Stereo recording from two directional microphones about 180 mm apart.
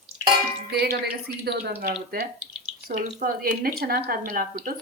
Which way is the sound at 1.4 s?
65° right (ahead or behind).